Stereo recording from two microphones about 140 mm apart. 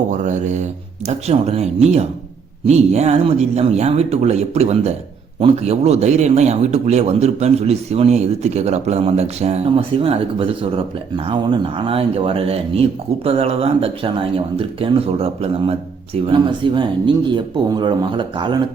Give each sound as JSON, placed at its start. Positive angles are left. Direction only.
{"t": 0.1, "sound": "a man's voice", "side_deg": -60}